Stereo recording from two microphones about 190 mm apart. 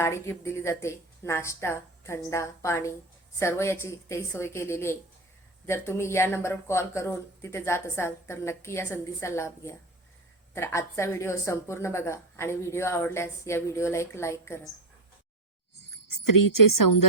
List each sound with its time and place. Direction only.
0.0 s speech: 15° left (ahead or behind)